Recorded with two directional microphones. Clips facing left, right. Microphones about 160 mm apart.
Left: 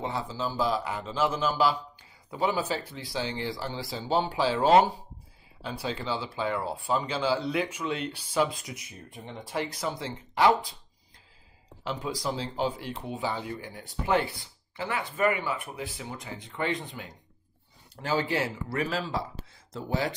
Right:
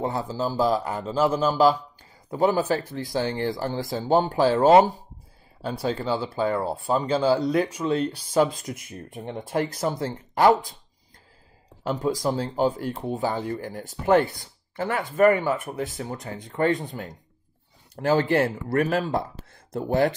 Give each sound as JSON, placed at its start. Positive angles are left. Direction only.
{"t": 0.0, "sound": "speech", "side_deg": -45}
{"t": 11.8, "sound": "speech", "side_deg": -45}